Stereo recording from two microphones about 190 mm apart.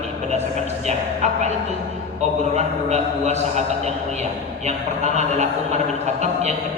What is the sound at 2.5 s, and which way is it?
A man's voice, 35° right (ahead or behind).